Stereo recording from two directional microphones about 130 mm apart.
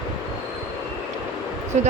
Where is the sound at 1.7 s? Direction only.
65° right (ahead or behind).